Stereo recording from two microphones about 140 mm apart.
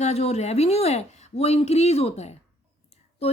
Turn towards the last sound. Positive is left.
turn(degrees=45)  # may be behind; listen again after turning